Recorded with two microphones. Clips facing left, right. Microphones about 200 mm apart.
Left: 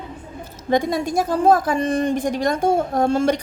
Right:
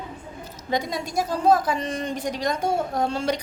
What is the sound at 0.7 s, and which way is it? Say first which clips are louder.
A woman's voice: left 7 dB; 50° left (ahead or behind).